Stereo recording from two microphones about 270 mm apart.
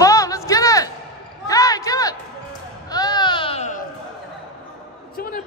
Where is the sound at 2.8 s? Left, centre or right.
Centre.